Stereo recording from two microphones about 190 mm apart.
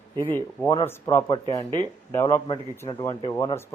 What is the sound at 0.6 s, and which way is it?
Speech, 15° left (ahead or behind).